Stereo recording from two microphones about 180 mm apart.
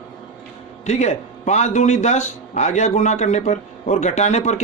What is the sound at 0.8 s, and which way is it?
A man's voice, 40° left (ahead or behind).